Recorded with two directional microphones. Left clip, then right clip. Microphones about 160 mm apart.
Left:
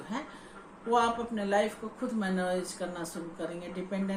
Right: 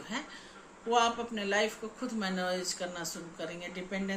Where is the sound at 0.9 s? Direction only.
15° right (ahead or behind).